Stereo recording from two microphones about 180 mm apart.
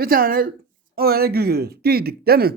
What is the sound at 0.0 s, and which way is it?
Speech, 55° right (ahead or behind).